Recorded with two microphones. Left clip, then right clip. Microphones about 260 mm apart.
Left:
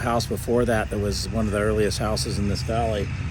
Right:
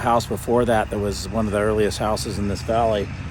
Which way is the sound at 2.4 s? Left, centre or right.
Right.